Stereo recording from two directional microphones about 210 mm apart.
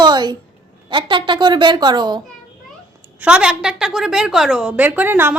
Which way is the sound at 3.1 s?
5° right (ahead or behind).